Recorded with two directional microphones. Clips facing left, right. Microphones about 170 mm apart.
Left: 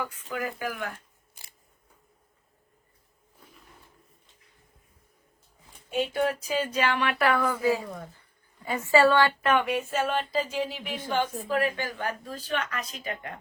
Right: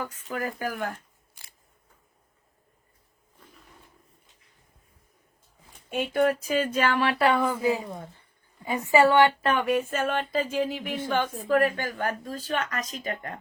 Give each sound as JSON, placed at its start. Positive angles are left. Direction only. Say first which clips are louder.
{"t": 0.0, "sound": "speech", "louder": "right 1 dB", "side_deg": -40}
{"t": 5.9, "sound": "a woman's voice", "louder": "right 3 dB", "side_deg": -50}
{"t": 9.4, "sound": "a woman's voice", "louder": "right 1 dB", "side_deg": -35}